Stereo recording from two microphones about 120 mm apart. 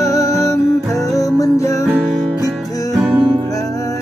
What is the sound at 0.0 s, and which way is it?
Music, 30° left (ahead or behind).